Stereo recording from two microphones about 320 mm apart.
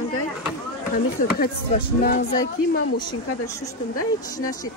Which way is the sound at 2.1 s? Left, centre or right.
Left.